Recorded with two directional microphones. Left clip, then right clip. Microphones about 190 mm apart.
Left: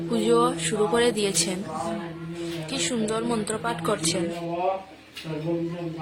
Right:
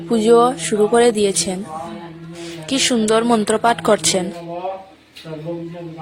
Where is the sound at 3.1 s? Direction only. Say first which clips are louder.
Right 12 dB; 45° right (ahead or behind).